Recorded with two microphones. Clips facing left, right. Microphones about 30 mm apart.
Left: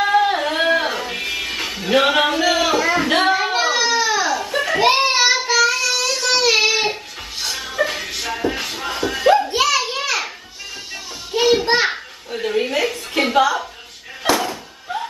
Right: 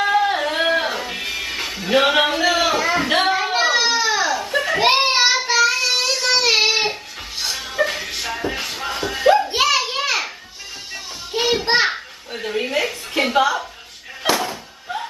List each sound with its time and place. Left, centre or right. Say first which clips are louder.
0.0 s music: left 1 dB; centre
3.9 s a sound: left 1 dB; centre
4.8 s child singing: left 1 dB; centre
6.1 s music: even; centre
6.6 s music: even; centre
7.4 s music: even; centre
9.5 s children playing: even; centre
11.6 s children playing: even; centre
11.9 s a sound: left 2 dB; centre
14.2 s music: left 1 dB; centre